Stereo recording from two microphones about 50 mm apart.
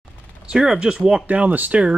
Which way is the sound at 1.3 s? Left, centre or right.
Right.